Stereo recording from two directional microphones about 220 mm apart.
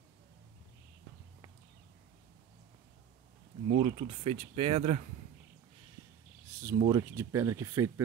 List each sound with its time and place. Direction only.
3.6 s speech: 25° right (ahead or behind)
6.6 s speech: 15° right (ahead or behind)